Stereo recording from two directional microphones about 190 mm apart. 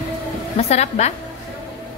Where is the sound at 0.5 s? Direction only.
35° left (ahead or behind).